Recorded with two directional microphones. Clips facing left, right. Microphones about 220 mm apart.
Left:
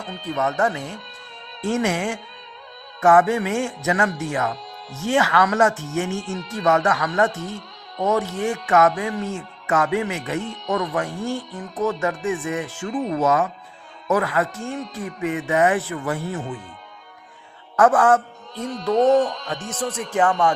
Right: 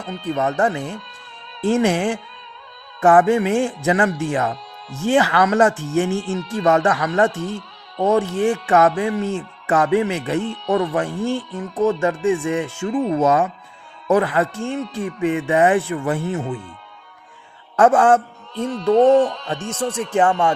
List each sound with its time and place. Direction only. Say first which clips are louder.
0.3 s speech: right 2 dB; 30° right (ahead or behind)
17.7 s a man's voice: right 2 dB; 25° right (ahead or behind)